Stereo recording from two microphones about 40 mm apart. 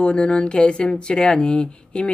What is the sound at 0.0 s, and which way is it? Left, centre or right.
Speech, left.